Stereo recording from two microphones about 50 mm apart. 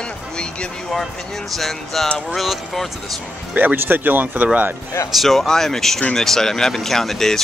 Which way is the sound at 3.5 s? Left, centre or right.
Right.